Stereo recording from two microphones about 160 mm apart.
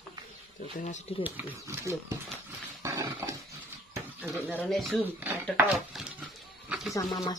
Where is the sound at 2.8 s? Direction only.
20° right (ahead or behind).